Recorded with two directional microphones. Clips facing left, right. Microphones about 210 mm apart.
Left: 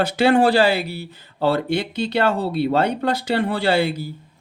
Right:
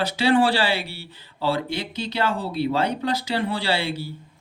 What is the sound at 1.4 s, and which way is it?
Speech, 60° left (ahead or behind).